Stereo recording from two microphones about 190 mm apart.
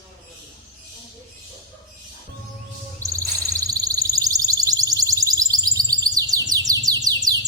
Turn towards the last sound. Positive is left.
turn(degrees=-20)  # may be behind; listen again after turning